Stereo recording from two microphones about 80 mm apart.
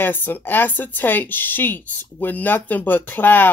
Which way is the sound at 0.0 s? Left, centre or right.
Left.